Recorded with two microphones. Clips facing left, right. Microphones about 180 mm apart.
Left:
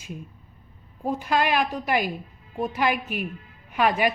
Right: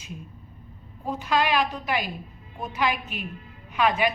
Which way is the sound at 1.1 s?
50° left (ahead or behind).